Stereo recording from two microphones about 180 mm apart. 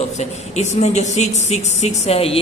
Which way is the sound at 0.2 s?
40° left (ahead or behind).